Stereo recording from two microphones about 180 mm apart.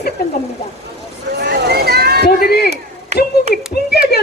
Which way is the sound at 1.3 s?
60° right (ahead or behind).